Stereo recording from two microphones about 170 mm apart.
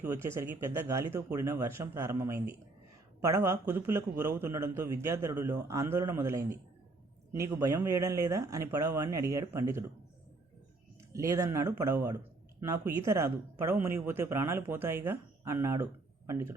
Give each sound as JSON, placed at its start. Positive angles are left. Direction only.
{"t": 0.0, "sound": "speech", "side_deg": -15}
{"t": 11.1, "sound": "speech", "side_deg": -20}